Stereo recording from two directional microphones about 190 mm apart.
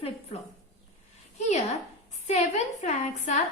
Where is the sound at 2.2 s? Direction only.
35° left (ahead or behind).